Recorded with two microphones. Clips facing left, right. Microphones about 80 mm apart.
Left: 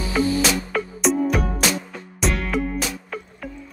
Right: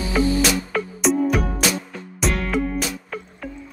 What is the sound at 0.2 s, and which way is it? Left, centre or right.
Music, centre.